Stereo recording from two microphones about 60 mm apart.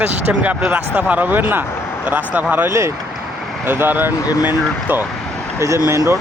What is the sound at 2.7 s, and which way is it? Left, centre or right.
Speech, right.